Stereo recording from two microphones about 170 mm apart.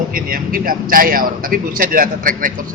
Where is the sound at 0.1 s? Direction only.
55° right (ahead or behind).